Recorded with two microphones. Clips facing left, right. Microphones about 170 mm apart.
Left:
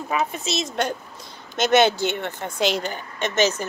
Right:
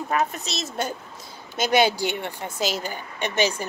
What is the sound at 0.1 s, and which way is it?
Speech, centre (ahead or behind).